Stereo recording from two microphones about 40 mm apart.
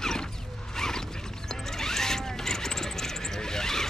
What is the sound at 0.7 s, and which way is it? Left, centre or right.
Mechanisms, centre.